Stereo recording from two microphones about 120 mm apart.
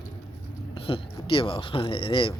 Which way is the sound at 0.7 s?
50° left (ahead or behind).